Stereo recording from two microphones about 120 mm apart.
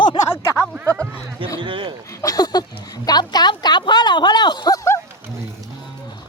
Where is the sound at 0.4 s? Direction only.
20° left (ahead or behind).